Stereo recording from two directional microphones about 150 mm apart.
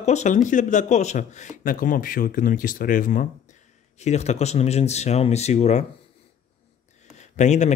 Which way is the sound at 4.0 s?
50° left (ahead or behind).